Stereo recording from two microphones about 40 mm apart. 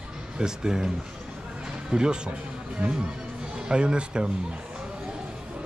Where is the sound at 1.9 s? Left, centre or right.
Centre.